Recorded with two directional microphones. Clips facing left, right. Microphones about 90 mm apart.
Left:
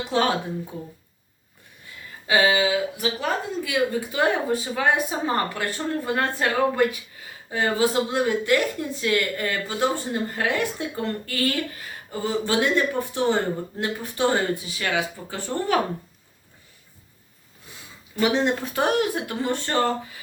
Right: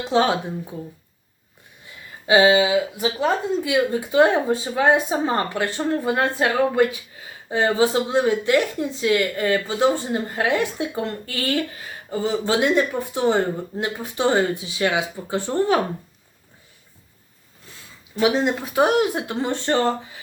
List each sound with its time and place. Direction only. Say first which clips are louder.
0.0 s speech: right 3 dB; 20° right (ahead or behind)
2.2 s speech: right 5 dB; 25° right (ahead or behind)
18.2 s speech: right 2 dB; 10° right (ahead or behind)